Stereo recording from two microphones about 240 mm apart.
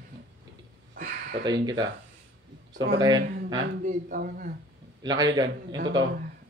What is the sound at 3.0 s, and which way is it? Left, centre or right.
Speech, centre.